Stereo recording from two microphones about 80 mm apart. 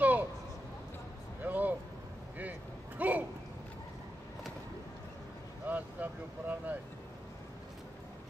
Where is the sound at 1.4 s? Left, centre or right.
Right.